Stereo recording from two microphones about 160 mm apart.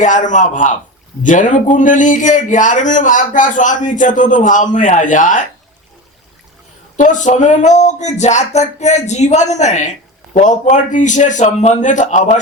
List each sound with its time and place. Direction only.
0.0 s a man's voice: 50° left (ahead or behind)
6.9 s a man's voice: 50° left (ahead or behind)